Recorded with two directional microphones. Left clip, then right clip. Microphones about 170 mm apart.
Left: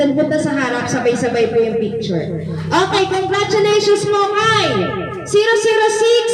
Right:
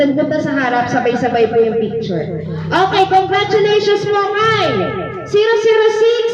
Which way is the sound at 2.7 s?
55° left (ahead or behind).